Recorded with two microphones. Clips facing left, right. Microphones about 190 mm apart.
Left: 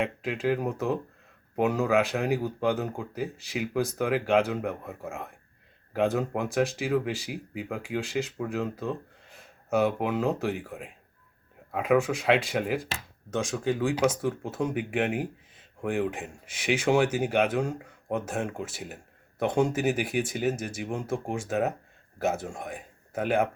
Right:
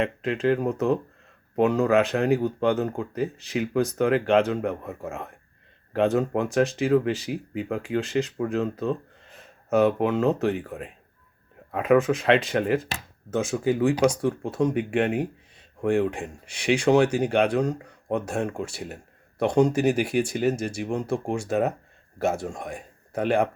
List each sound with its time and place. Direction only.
0.0 s speech: 5° left (ahead or behind)